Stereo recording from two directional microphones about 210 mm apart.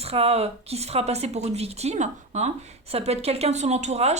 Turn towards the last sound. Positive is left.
turn(degrees=-30)  # may be behind; listen again after turning